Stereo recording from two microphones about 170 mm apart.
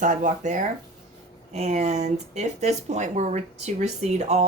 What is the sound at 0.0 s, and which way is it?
Speech, 45° right (ahead or behind).